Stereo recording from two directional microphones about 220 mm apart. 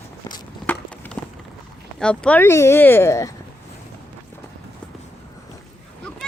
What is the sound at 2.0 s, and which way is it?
Speech, 5° left (ahead or behind).